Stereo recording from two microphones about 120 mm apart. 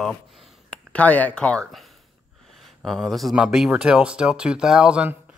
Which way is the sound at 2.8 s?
Centre (ahead or behind).